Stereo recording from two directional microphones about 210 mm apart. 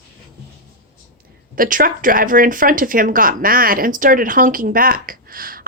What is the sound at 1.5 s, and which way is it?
Speech, 40° right (ahead or behind).